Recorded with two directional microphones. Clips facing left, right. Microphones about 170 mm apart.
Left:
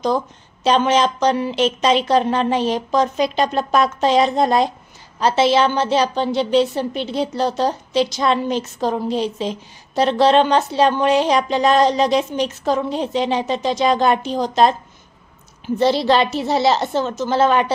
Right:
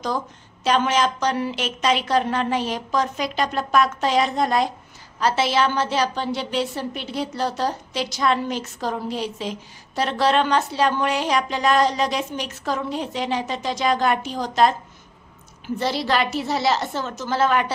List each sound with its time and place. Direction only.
0.7 s a woman's voice: 25° left (ahead or behind)